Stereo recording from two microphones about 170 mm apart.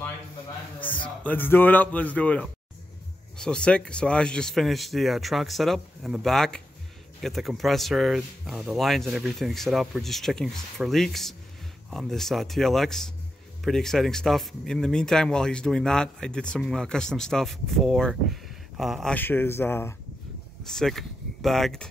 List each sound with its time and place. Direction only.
1.0 s speech: 10° left (ahead or behind)
20.6 s speech: centre (ahead or behind)